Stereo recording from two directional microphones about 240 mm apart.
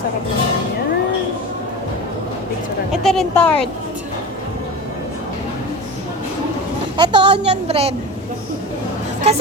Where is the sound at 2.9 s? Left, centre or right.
Centre.